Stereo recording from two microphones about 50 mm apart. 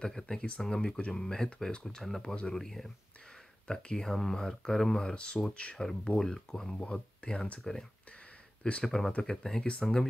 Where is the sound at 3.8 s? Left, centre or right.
Centre.